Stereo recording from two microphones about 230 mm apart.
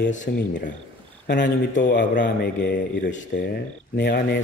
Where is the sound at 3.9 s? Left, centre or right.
Left.